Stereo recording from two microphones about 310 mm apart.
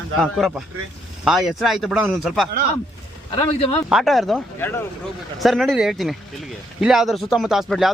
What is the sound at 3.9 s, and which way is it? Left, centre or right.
Speech, centre.